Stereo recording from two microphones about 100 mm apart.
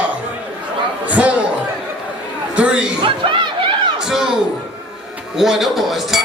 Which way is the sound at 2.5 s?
10° right (ahead or behind).